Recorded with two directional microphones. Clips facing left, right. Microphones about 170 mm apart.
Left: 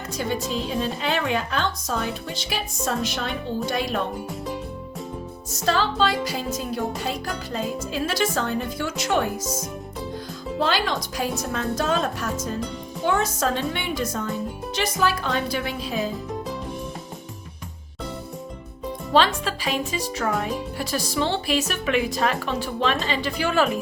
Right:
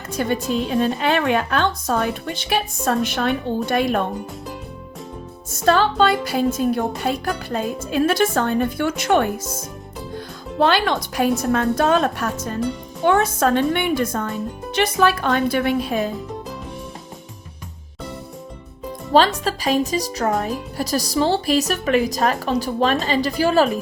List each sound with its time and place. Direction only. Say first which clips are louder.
0.1 s a woman's voice: right 5 dB; 60° right (ahead or behind)
5.5 s a woman's voice: right 6 dB; 55° right (ahead or behind)
10.6 s a woman's voice: right 6 dB; 60° right (ahead or behind)
16.0 s music: right 3 dB; centre (ahead or behind)
19.1 s speech: right 4 dB; 40° right (ahead or behind)